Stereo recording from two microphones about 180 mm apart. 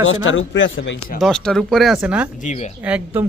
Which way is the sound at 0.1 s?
90° left.